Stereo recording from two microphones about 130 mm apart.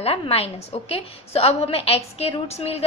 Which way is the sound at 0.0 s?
50° left (ahead or behind).